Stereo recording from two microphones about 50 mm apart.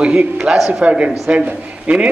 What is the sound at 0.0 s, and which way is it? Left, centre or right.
A man's voice, right.